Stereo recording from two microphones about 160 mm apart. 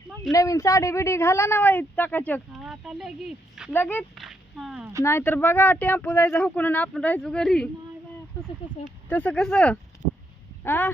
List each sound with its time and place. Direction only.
0.3 s speech: 20° left (ahead or behind)
2.5 s speech: 5° right (ahead or behind)
3.7 s speech: 15° left (ahead or behind)
4.2 s a sound: centre (ahead or behind)
5.0 s speech: 15° left (ahead or behind)
9.0 s speech: 10° left (ahead or behind)